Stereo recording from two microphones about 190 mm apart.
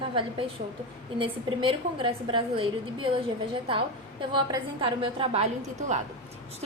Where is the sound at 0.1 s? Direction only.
30° right (ahead or behind).